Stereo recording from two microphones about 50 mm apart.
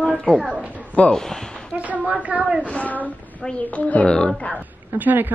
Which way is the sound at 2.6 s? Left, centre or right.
Left.